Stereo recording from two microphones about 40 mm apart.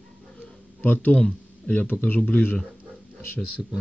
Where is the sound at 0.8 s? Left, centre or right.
Left.